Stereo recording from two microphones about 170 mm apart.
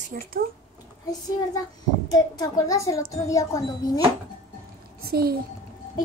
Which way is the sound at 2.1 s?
20° left (ahead or behind).